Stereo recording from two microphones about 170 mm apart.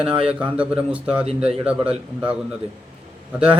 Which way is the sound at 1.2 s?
35° right (ahead or behind).